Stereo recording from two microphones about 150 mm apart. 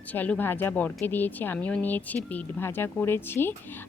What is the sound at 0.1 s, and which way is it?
Speech, 10° left (ahead or behind).